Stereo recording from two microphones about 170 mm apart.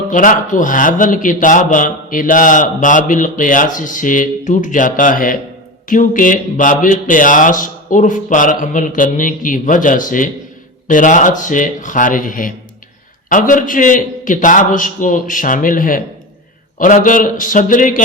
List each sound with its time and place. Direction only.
0.1 s a man's voice: 50° left (ahead or behind)